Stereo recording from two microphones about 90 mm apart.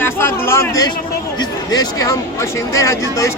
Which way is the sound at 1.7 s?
40° left (ahead or behind).